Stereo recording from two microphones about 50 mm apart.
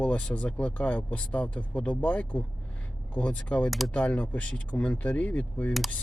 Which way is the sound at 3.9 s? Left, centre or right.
Left.